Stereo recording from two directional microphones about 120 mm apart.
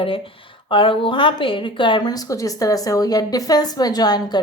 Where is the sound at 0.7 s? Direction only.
45° left (ahead or behind).